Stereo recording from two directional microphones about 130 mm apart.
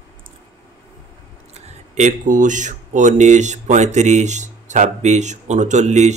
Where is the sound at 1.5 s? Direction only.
60° right (ahead or behind).